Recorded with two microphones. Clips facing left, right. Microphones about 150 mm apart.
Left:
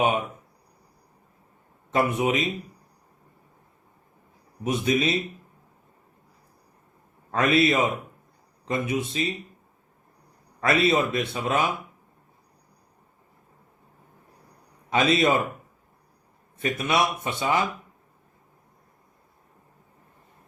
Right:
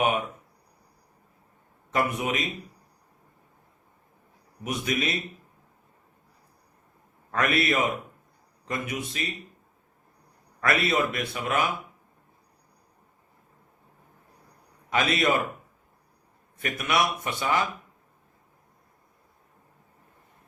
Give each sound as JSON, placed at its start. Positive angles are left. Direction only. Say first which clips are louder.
{"t": 1.9, "sound": "a man's voice", "louder": "left 4 dB", "side_deg": 25}
{"t": 4.6, "sound": "a man's voice", "louder": "left 5 dB", "side_deg": 25}
{"t": 7.3, "sound": "a man's voice", "louder": "left 4 dB", "side_deg": 25}
{"t": 10.6, "sound": "a man's voice", "louder": "left 3 dB", "side_deg": 25}
{"t": 14.8, "sound": "a man's voice", "louder": "left 3 dB", "side_deg": 25}
{"t": 16.6, "sound": "a man's voice", "louder": "left 2 dB", "side_deg": 25}